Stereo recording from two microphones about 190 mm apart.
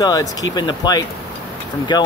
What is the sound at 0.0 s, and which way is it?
Speech, 20° left (ahead or behind).